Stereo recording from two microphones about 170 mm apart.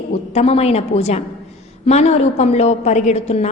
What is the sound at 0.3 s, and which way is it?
A woman's voice, 35° left (ahead or behind).